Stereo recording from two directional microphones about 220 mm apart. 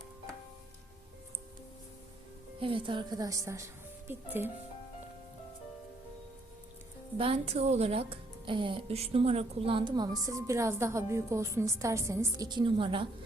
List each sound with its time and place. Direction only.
2.6 s speech: 25° right (ahead or behind)
7.2 s speech: 25° right (ahead or behind)